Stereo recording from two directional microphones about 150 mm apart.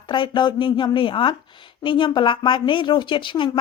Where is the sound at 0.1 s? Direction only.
30° left (ahead or behind).